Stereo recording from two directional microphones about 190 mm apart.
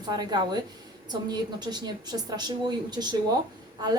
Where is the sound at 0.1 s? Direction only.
20° right (ahead or behind).